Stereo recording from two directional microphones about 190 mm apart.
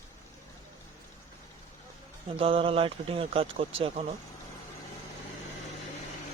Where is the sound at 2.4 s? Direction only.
30° right (ahead or behind).